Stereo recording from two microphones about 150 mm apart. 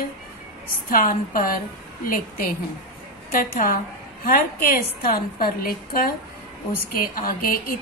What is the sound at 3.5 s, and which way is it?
Speech, 75° left (ahead or behind).